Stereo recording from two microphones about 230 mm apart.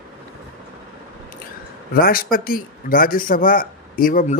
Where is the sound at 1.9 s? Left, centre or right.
Left.